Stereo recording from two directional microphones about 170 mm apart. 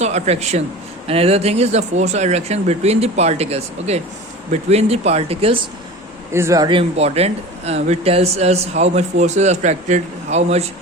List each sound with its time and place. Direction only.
0.0 s speech: 40° right (ahead or behind)
6.3 s speech: 15° right (ahead or behind); by 10.7 s 40° right (ahead or behind)